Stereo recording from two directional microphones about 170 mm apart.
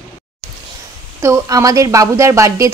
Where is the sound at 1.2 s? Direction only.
20° right (ahead or behind).